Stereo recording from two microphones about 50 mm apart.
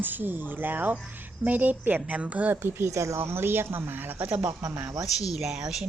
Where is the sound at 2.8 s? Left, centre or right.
Right.